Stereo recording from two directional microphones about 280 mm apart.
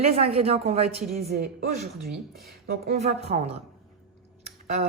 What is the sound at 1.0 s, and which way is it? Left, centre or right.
Speech, centre.